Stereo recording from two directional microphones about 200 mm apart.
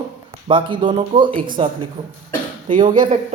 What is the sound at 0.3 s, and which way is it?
A woman's voice, 25° right (ahead or behind).